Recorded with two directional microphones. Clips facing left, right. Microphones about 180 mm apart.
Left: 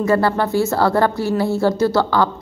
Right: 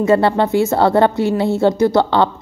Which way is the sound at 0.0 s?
20° right (ahead or behind).